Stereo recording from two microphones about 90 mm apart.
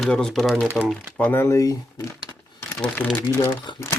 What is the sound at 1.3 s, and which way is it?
Speech, 25° left (ahead or behind).